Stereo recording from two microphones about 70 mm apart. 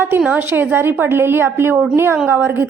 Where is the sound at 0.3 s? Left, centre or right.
Right.